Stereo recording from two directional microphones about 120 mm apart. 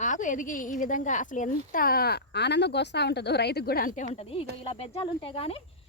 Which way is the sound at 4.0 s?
90° left.